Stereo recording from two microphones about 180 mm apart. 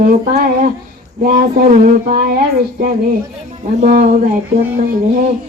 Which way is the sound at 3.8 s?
50° right (ahead or behind).